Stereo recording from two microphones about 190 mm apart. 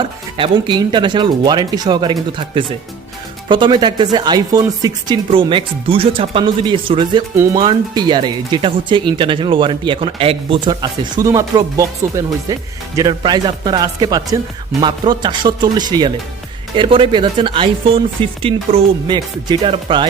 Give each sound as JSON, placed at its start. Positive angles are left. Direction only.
{"t": 0.0, "sound": "speech", "side_deg": -25}
{"t": 3.5, "sound": "speech", "side_deg": -25}